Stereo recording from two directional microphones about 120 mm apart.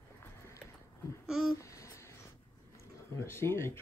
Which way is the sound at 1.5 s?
25° left (ahead or behind).